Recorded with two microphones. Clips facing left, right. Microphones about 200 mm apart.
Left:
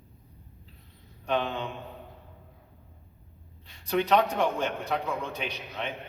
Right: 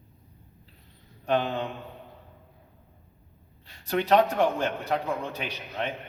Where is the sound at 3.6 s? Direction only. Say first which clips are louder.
Even; 40° right (ahead or behind).